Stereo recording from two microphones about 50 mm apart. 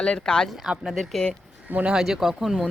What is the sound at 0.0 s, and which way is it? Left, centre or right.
Speech, centre.